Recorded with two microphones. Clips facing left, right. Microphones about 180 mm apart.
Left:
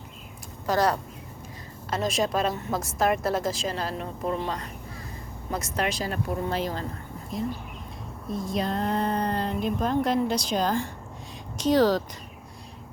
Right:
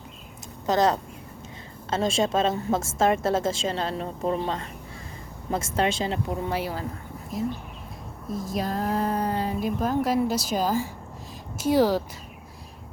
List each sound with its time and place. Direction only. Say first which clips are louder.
0.7 s a woman's voice: right 2 dB; 20° right (ahead or behind)
6.5 s speech: even; 10° right (ahead or behind)
8.3 s speech: even; 5° right (ahead or behind)